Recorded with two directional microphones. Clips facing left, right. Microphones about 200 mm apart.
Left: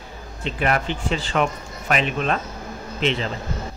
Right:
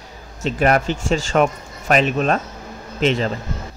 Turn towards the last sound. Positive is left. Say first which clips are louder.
# right 4 dB
turn(degrees=-45)  # may be behind; listen again after turning